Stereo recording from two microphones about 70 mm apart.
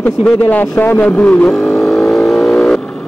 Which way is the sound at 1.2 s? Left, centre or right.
Left.